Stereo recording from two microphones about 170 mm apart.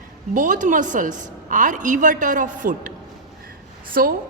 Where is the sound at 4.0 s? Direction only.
60° right (ahead or behind).